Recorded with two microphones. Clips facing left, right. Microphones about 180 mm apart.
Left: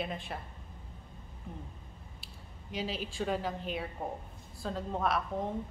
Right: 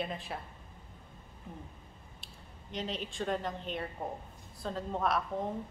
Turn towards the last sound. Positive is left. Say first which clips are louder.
# even
turn(degrees=0)  # may be behind; listen again after turning